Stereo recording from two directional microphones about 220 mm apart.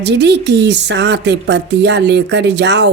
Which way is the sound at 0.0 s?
50° right (ahead or behind).